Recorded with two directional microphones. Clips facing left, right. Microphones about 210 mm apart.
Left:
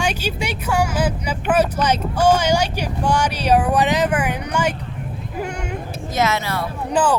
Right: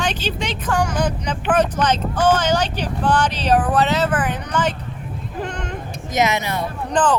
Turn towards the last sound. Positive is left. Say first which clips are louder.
# even
turn(degrees=10)  # may be behind; listen again after turning